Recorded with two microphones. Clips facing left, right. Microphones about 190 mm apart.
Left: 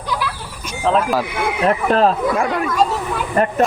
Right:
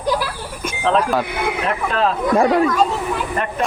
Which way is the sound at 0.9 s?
5° left (ahead or behind).